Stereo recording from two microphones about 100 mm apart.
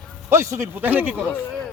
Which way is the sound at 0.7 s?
20° right (ahead or behind).